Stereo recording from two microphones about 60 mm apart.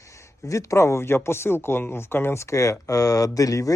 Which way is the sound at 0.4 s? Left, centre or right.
Left.